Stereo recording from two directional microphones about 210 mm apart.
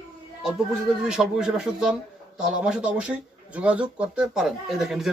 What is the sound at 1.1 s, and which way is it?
Speech, 5° right (ahead or behind).